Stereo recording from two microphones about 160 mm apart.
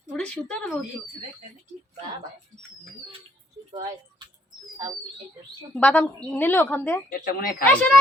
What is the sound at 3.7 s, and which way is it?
Speech, 25° right (ahead or behind).